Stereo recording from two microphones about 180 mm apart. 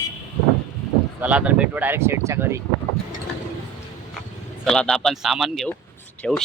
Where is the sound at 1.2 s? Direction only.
5° right (ahead or behind).